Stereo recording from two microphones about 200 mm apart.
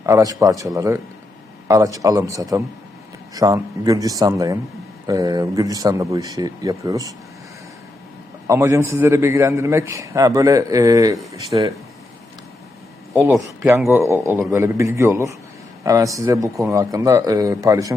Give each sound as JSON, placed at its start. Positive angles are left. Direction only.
{"t": 0.0, "sound": "a man's voice", "side_deg": -15}
{"t": 8.4, "sound": "a man's voice", "side_deg": -15}
{"t": 13.6, "sound": "a man's voice", "side_deg": -10}